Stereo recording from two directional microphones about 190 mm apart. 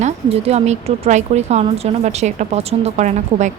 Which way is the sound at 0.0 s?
35° right (ahead or behind).